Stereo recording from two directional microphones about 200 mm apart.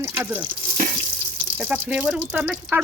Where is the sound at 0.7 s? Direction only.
45° right (ahead or behind).